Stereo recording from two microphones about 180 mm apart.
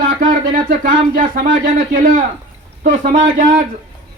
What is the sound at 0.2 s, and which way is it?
Speech, 50° right (ahead or behind).